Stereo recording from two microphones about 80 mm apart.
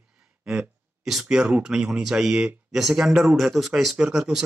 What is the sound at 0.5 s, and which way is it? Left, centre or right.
A man's voice, centre.